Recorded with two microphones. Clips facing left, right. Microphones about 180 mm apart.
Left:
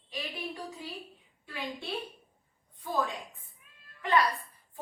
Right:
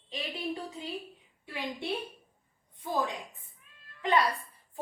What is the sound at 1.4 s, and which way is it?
A woman's voice, 20° right (ahead or behind).